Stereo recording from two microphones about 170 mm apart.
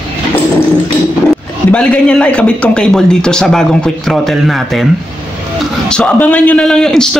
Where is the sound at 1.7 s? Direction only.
5° left (ahead or behind).